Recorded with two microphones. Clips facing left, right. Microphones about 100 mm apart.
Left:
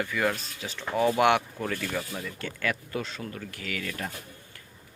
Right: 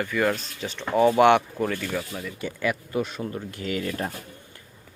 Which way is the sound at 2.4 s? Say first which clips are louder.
Right 5 dB; 15° right (ahead or behind).